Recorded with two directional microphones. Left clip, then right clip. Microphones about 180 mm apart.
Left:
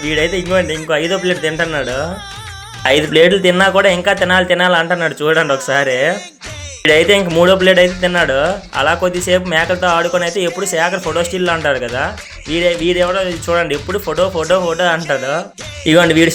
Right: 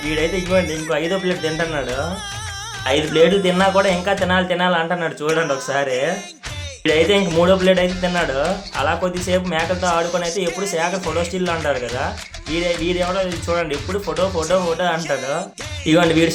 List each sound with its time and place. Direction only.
0.1 s speech: 20° left (ahead or behind)
2.8 s speech: 25° left (ahead or behind)